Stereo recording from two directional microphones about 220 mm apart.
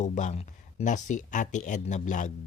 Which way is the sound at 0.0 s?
35° left (ahead or behind).